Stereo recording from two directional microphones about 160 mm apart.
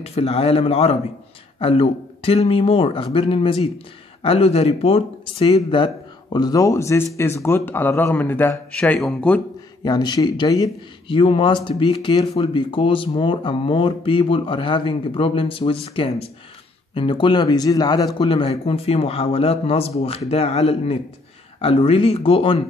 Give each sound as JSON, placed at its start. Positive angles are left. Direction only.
{"t": 0.0, "sound": "a man's voice", "side_deg": 40}
{"t": 9.8, "sound": "speech", "side_deg": 25}